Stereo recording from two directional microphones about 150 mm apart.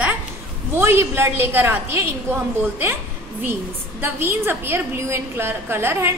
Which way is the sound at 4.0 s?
15° right (ahead or behind).